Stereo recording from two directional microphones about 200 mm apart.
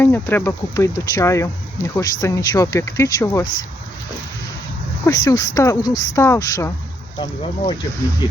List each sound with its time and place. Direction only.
0.0 s speech: 10° left (ahead or behind)
5.0 s speech: 20° left (ahead or behind)